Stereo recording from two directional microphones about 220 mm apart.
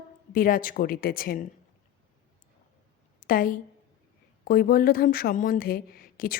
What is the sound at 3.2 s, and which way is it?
A woman's voice, 40° left (ahead or behind).